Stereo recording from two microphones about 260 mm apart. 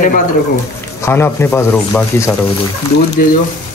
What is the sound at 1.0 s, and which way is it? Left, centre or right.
Speech, centre.